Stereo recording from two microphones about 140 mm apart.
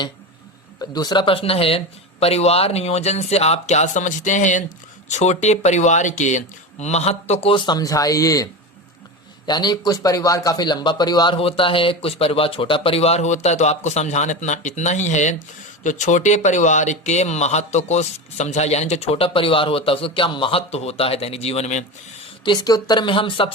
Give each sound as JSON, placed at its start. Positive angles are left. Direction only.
{"t": 0.8, "sound": "speech", "side_deg": 30}
{"t": 7.5, "sound": "speech", "side_deg": 30}
{"t": 9.5, "sound": "a man's voice", "side_deg": 30}
{"t": 22.4, "sound": "a man's voice", "side_deg": 30}